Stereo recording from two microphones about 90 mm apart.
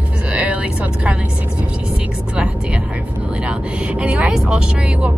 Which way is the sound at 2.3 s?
15° right (ahead or behind).